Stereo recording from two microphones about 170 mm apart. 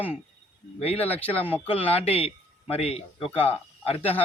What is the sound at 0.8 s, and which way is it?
Speech, 35° left (ahead or behind).